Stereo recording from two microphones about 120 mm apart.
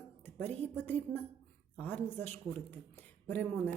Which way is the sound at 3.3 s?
15° left (ahead or behind).